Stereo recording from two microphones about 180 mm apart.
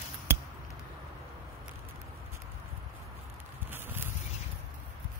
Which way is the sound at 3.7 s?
10° right (ahead or behind).